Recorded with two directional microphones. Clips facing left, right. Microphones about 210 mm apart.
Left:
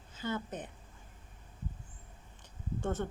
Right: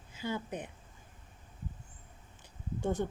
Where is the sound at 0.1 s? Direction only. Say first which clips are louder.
Even; 10° right (ahead or behind).